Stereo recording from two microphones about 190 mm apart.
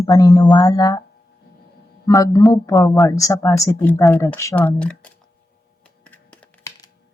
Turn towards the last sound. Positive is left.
turn(degrees=10)  # may be behind; listen again after turning